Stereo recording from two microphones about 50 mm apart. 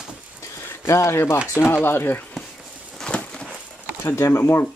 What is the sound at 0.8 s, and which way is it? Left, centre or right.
Speech, left.